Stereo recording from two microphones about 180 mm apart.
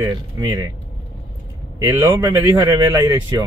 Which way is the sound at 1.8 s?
15° right (ahead or behind).